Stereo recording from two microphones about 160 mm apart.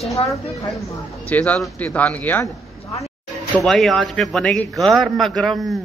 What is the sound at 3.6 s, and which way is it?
A man's voice, centre (ahead or behind).